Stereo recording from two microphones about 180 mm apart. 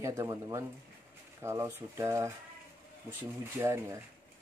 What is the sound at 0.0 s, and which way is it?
Speech, 15° right (ahead or behind).